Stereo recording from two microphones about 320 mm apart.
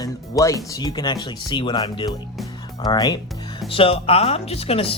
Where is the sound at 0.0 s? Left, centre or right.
Centre.